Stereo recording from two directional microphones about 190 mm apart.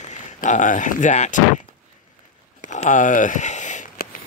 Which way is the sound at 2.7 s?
40° left (ahead or behind).